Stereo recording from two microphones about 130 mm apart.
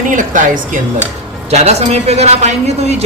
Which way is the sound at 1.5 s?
55° right (ahead or behind).